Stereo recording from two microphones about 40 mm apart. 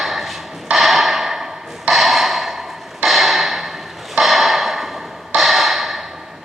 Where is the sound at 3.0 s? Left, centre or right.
Centre.